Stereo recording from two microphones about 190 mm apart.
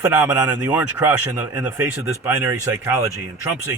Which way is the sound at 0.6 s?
15° right (ahead or behind).